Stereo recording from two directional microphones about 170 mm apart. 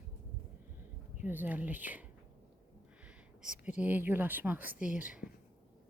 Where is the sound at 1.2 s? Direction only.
10° right (ahead or behind).